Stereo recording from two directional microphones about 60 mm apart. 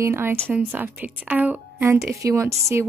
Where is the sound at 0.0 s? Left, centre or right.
Right.